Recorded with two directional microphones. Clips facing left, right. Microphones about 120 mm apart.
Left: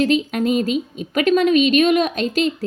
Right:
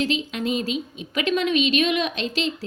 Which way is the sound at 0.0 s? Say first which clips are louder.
Left 7 dB; 45° left (ahead or behind).